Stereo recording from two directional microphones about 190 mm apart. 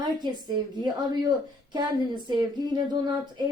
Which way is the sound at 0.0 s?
20° right (ahead or behind).